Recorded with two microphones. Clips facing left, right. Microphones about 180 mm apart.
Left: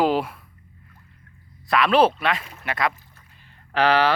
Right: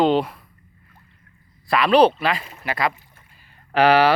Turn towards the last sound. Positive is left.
turn(degrees=-10)  # may be behind; listen again after turning